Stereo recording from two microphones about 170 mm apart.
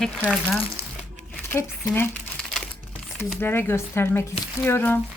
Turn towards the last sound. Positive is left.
turn(degrees=15)  # may be behind; listen again after turning